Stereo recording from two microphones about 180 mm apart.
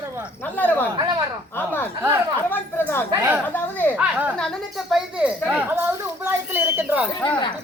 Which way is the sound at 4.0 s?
5° right (ahead or behind).